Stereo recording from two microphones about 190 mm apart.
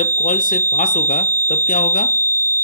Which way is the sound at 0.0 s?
45° left (ahead or behind).